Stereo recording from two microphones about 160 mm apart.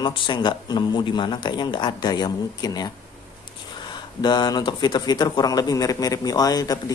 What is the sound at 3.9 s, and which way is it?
Speech, 25° left (ahead or behind).